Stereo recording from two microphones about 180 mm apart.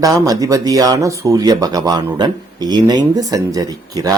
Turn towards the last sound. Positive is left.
turn(degrees=-20)  # may be behind; listen again after turning